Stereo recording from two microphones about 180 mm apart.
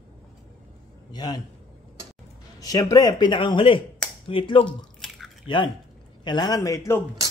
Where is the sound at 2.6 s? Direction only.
20° left (ahead or behind).